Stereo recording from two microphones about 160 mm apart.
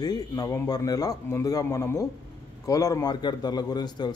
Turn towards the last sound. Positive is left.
turn(degrees=25)  # may be behind; listen again after turning